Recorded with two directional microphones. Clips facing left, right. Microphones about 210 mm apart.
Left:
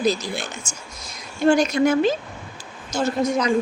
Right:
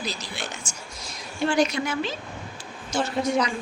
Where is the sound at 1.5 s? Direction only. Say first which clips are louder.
Left 7 dB; 45° left (ahead or behind).